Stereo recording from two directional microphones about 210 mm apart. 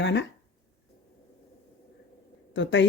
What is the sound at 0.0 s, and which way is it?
Speech, 55° left (ahead or behind).